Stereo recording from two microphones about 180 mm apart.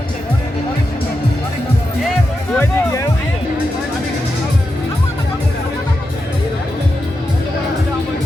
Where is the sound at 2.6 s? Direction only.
15° left (ahead or behind).